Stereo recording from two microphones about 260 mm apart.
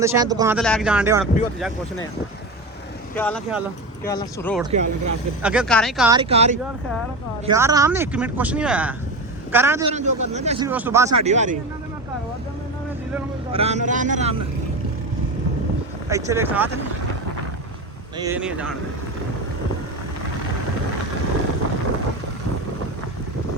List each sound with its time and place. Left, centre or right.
0.0 s speech: centre
0.5 s speech: centre
3.2 s speech: centre
4.6 s speech: right
5.4 s speech: centre
6.1 s speech: centre
7.4 s speech: centre
9.9 s speech: right
10.7 s speech: centre
11.2 s speech: right
13.5 s speech: right
16.0 s speech: centre
18.2 s speech: centre